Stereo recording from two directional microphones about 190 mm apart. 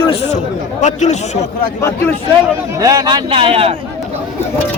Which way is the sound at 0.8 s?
40° left (ahead or behind).